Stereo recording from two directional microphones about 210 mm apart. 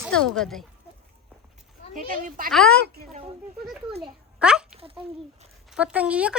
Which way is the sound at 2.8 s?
50° right (ahead or behind).